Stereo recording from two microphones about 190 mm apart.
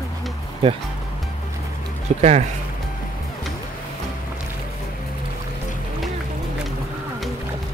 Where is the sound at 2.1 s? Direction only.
35° right (ahead or behind).